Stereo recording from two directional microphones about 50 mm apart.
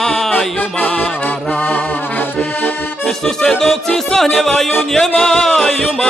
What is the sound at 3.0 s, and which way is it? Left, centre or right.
Music, centre.